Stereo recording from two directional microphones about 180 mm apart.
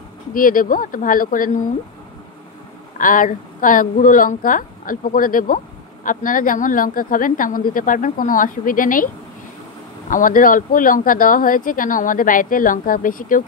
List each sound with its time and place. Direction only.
0.3 s speech: 50° left (ahead or behind)
3.0 s speech: 50° left (ahead or behind)